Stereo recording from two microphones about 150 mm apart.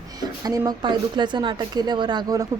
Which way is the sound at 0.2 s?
25° right (ahead or behind).